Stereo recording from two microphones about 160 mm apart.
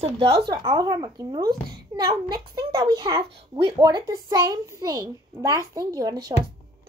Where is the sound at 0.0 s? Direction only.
35° right (ahead or behind).